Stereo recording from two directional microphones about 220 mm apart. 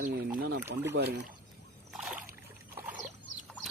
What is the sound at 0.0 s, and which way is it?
Boat, 40° right (ahead or behind).